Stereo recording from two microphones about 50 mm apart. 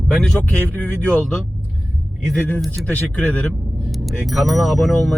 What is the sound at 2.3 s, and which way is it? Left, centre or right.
Speech, left.